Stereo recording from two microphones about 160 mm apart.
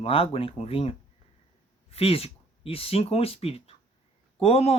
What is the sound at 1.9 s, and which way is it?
Speech, 35° left (ahead or behind).